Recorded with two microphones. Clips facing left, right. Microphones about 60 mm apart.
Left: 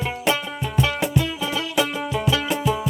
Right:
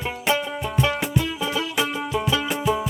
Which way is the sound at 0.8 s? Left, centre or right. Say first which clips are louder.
Left 1 dB; centre.